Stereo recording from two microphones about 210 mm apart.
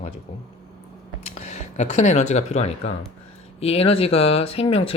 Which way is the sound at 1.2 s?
35° left (ahead or behind).